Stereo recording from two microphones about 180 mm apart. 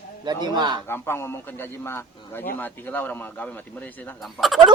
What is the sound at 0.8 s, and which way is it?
A man's voice, 15° left (ahead or behind).